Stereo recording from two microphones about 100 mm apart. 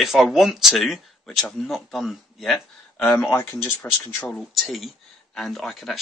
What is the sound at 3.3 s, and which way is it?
Speech, 20° left (ahead or behind).